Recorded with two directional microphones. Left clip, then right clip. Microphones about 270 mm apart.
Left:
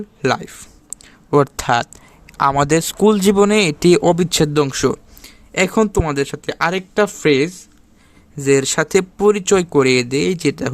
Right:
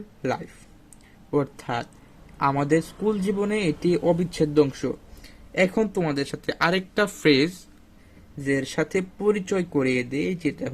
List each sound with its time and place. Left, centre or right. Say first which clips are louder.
0.2 s speech: left 10 dB; left
8.4 s speech: left 10 dB; left